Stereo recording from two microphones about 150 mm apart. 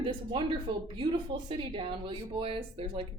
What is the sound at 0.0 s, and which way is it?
A woman's voice, 35° right (ahead or behind).